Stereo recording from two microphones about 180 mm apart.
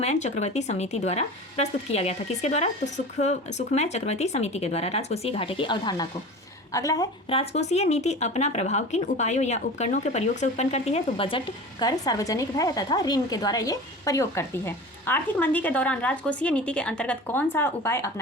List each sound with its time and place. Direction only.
0.0 s speech: 40° left (ahead or behind); by 7.1 s 20° left (ahead or behind)
7.3 s speech: 35° left (ahead or behind); by 18.1 s 15° left (ahead or behind)